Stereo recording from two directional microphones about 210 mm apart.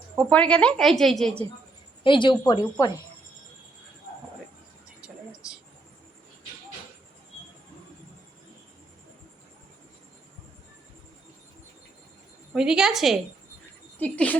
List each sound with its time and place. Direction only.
0.2 s a woman's voice: 5° left (ahead or behind)
2.0 s a woman's voice: 25° left (ahead or behind)
4.9 s a sound: 5° right (ahead or behind)
12.5 s a woman's voice: 5° right (ahead or behind)